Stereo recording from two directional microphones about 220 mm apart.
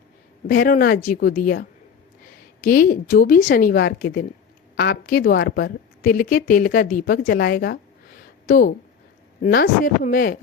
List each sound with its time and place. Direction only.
0.4 s a woman's voice: 40° left (ahead or behind)
2.6 s a woman's voice: 40° left (ahead or behind)